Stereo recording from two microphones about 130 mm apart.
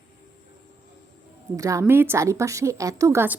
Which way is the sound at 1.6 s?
25° right (ahead or behind).